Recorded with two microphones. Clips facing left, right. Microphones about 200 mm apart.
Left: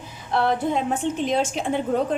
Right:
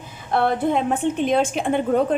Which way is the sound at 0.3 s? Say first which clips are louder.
Right 2 dB; 55° right (ahead or behind).